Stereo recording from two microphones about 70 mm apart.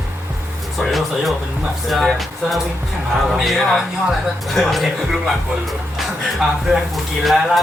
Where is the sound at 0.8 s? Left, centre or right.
Centre.